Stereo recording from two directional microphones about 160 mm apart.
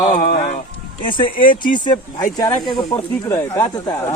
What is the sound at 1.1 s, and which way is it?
A man's voice, 30° left (ahead or behind).